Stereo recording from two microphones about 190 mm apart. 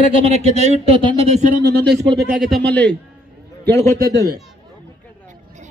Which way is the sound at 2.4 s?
5° left (ahead or behind).